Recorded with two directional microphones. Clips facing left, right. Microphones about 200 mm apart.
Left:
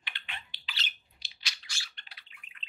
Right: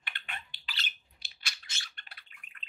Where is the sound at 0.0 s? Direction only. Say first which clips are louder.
Right 2 dB; 50° right (ahead or behind).